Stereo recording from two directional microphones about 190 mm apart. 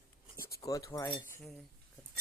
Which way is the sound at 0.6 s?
15° left (ahead or behind).